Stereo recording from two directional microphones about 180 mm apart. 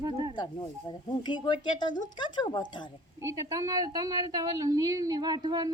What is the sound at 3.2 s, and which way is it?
A woman's voice, 15° right (ahead or behind).